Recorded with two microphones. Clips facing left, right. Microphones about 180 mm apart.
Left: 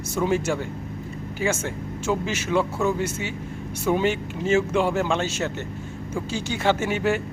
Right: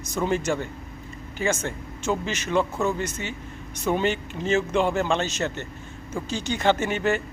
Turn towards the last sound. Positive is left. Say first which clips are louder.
# left 1 dB
turn(degrees=10)  # may be behind; listen again after turning